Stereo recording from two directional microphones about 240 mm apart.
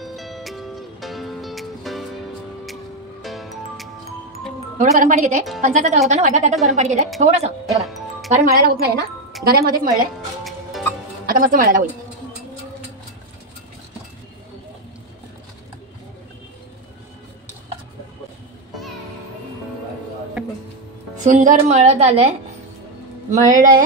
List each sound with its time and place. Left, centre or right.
0.0 s music: centre
4.7 s a woman's voice: right
8.3 s speech: right
10.4 s music: centre
11.2 s speech: right
20.4 s a sound: centre
21.2 s a woman's voice: right
23.3 s speech: right